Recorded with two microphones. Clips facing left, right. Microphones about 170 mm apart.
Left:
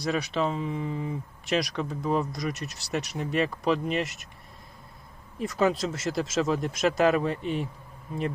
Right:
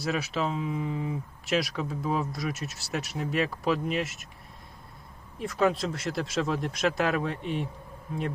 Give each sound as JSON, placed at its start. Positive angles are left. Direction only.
{"t": 0.0, "sound": "speech", "side_deg": -5}
{"t": 5.4, "sound": "speech", "side_deg": 0}